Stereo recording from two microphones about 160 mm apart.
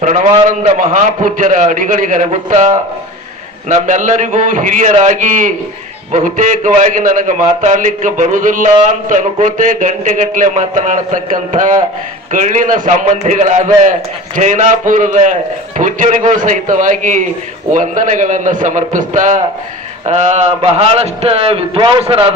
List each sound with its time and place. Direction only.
0.0 s a man's voice: 50° right (ahead or behind)